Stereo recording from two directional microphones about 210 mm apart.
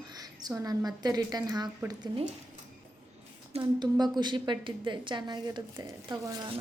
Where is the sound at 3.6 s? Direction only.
20° right (ahead or behind).